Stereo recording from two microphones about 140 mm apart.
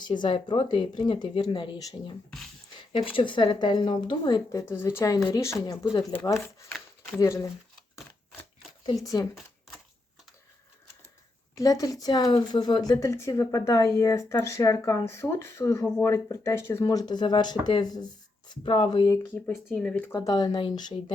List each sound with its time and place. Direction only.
0.0 s speech: 35° left (ahead or behind)
4.7 s a woman's voice: 15° left (ahead or behind)
7.2 s a woman's voice: 20° left (ahead or behind)
9.0 s a woman's voice: 25° left (ahead or behind)
11.5 s a woman's voice: 25° left (ahead or behind)
19.7 s speech: 10° left (ahead or behind)
20.1 s a woman's voice: 25° left (ahead or behind)